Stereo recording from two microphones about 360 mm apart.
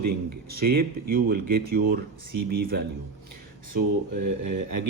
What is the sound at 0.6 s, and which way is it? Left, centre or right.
Speech, right.